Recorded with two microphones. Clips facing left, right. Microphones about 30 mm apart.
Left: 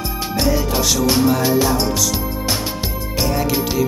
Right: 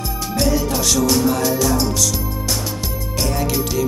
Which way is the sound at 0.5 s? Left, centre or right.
Centre.